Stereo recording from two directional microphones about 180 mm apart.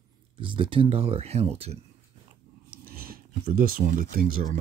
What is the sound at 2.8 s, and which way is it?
Speech, 55° right (ahead or behind).